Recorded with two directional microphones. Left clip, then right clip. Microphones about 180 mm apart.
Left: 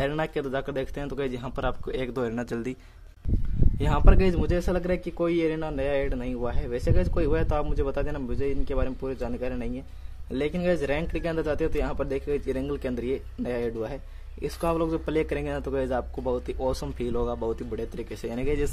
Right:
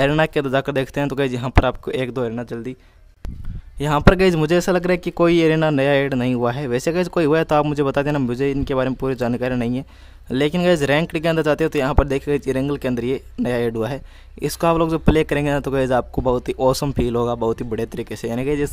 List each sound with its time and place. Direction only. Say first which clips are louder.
0.0 s speech: right 10 dB; 40° right (ahead or behind); by 2.7 s 20° right (ahead or behind)
3.8 s speech: right 10 dB; 40° right (ahead or behind)